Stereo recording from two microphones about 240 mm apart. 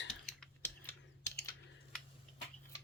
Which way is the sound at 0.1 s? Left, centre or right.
Centre.